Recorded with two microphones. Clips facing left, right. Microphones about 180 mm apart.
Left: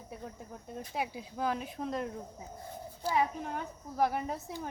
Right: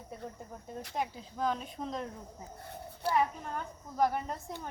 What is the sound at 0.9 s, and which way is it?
Speech, 10° left (ahead or behind).